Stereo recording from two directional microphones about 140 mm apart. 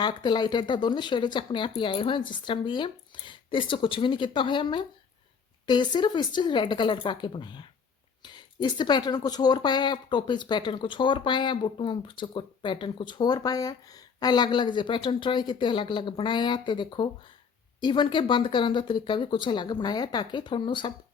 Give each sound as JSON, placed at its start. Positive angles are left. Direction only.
{"t": 0.0, "sound": "speech", "side_deg": 30}